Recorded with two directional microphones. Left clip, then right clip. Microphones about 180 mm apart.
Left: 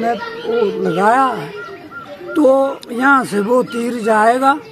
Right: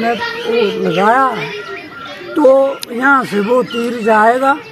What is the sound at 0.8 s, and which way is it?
Speech, 20° left (ahead or behind).